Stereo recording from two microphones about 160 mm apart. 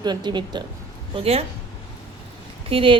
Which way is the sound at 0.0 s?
25° right (ahead or behind).